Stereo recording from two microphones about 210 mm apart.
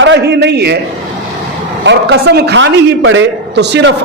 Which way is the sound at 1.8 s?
50° right (ahead or behind).